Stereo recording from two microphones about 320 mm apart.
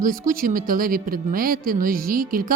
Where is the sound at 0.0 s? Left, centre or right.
Right.